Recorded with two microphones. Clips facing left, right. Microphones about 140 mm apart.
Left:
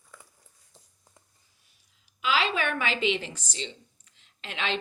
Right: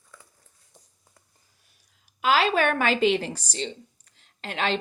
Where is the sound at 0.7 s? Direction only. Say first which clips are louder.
Right 2 dB; 15° right (ahead or behind).